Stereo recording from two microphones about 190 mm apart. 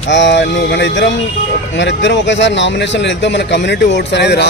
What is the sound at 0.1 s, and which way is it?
Speech, 70° left (ahead or behind).